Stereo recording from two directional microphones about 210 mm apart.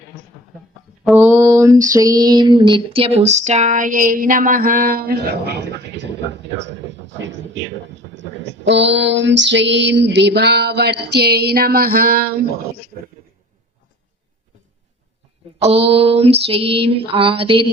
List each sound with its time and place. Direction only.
1.2 s a sound: 15° right (ahead or behind); by 7.4 s 60° right (ahead or behind)
8.1 s female singing: 60° right (ahead or behind)
15.6 s female singing: 30° right (ahead or behind)